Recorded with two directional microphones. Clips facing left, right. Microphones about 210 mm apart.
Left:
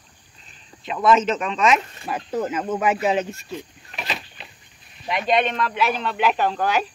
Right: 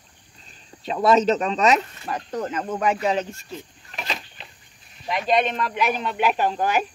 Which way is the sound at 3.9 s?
5° left (ahead or behind).